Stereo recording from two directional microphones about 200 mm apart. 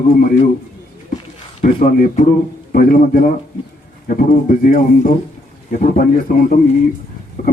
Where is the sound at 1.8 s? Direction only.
45° left (ahead or behind).